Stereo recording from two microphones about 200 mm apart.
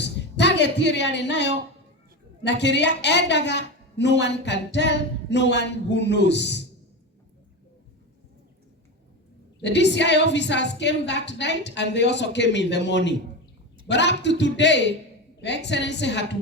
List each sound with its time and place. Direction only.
0.0 s a sound: 60° left (ahead or behind)
2.4 s a woman's voice: 60° left (ahead or behind)
9.6 s a woman's voice: 60° left (ahead or behind)